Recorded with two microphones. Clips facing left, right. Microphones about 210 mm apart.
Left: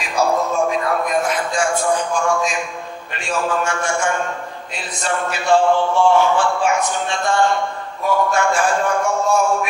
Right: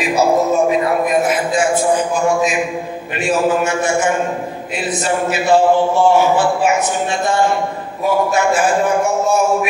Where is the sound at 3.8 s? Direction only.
5° right (ahead or behind).